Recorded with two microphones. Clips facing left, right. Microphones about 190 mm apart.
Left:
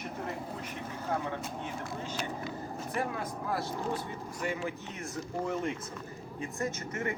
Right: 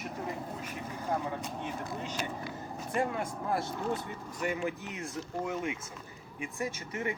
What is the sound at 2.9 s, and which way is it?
Speech, 25° right (ahead or behind).